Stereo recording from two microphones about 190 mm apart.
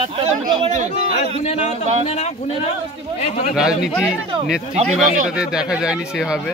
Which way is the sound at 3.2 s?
35° left (ahead or behind).